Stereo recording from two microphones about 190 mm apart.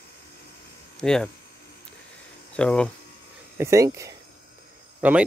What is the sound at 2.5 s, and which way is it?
Speech, 5° left (ahead or behind).